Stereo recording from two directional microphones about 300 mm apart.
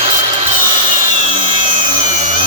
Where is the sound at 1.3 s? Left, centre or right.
Centre.